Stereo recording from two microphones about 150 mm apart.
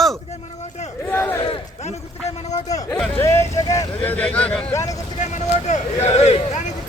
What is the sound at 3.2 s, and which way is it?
Speech, 15° left (ahead or behind).